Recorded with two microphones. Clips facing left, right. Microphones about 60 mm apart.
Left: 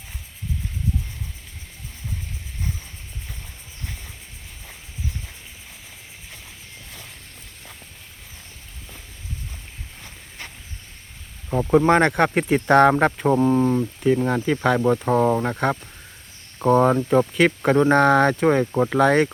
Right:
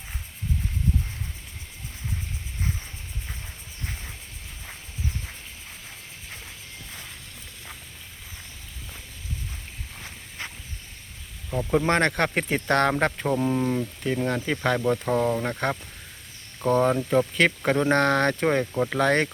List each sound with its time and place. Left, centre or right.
11.7 s speech: centre
12.6 s speech: centre